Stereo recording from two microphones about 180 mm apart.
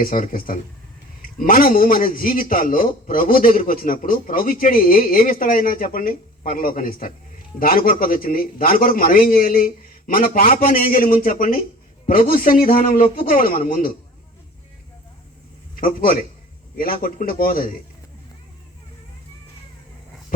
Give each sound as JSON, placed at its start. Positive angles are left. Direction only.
{"t": 0.0, "sound": "a man's voice", "side_deg": 50}
{"t": 15.7, "sound": "a man's voice", "side_deg": 50}